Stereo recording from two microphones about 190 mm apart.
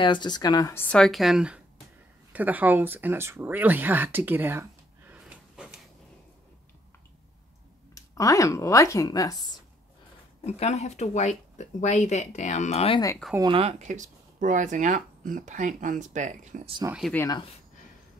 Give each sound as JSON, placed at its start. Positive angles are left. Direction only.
{"t": 0.0, "sound": "speech", "side_deg": 25}
{"t": 5.1, "sound": "gasp", "side_deg": -5}
{"t": 7.9, "sound": "speech", "side_deg": 20}
{"t": 10.4, "sound": "speech", "side_deg": 35}
{"t": 13.4, "sound": "speech", "side_deg": -30}
{"t": 17.1, "sound": "speech", "side_deg": 15}